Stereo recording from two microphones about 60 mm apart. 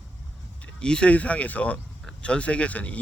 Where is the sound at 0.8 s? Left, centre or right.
Centre.